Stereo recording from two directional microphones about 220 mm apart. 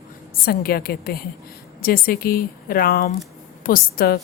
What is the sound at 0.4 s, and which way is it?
A woman's voice, 45° left (ahead or behind).